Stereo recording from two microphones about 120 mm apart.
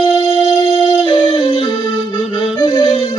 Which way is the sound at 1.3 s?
45° left (ahead or behind).